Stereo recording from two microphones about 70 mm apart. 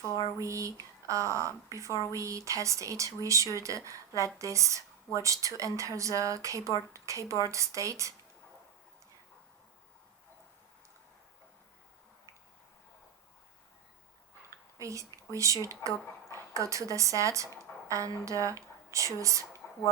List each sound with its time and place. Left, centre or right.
0.3 s speech: right
14.8 s a woman's voice: right